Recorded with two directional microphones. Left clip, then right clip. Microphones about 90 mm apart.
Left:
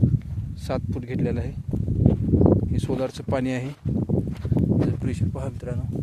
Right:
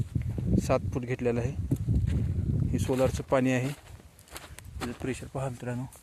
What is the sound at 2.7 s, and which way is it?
Speech, 25° left (ahead or behind).